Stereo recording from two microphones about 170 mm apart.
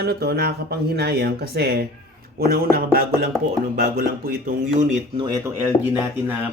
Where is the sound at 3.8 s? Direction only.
60° right (ahead or behind).